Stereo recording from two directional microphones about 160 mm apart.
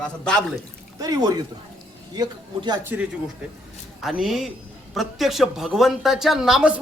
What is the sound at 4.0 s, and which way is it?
A man's voice, centre (ahead or behind).